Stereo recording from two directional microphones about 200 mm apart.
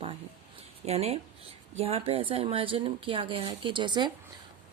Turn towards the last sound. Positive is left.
turn(degrees=-20)  # may be behind; listen again after turning